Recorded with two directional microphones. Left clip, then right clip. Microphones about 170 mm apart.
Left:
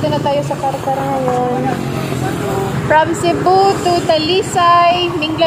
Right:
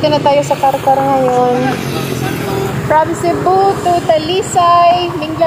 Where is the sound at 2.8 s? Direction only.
5° left (ahead or behind).